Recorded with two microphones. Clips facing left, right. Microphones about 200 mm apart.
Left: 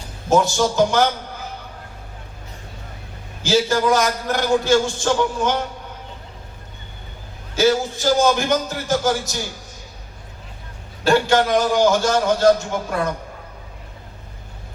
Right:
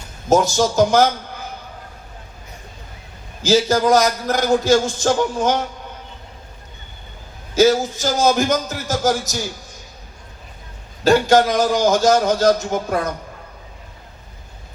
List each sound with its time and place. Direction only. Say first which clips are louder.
0.3 s a man's voice: right 1 dB; 40° right (ahead or behind)
3.4 s a man's voice: right 2 dB; 40° right (ahead or behind)
7.5 s a man's voice: right 3 dB; 40° right (ahead or behind)
11.0 s a man's voice: right 3 dB; 40° right (ahead or behind)